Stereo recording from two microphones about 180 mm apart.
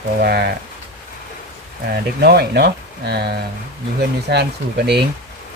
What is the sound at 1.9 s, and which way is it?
Speech, 60° right (ahead or behind).